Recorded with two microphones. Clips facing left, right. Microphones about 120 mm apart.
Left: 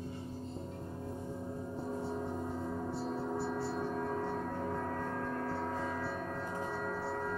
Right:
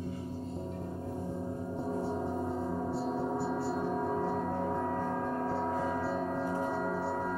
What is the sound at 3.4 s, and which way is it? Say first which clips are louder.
Gong: right 3 dB; centre (ahead or behind).